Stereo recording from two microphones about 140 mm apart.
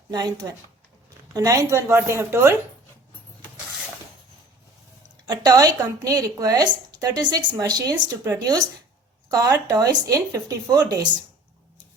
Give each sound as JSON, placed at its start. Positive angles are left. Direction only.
{"t": 0.1, "sound": "a woman's voice", "side_deg": -30}
{"t": 5.2, "sound": "a woman's voice", "side_deg": -30}